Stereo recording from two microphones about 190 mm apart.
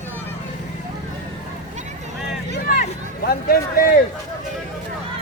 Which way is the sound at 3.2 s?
50° left (ahead or behind).